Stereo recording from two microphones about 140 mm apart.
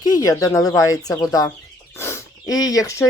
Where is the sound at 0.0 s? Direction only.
25° left (ahead or behind).